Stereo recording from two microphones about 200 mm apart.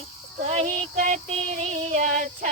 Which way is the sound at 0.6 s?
40° right (ahead or behind).